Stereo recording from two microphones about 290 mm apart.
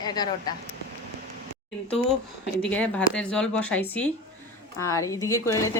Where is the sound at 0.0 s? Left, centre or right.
Centre.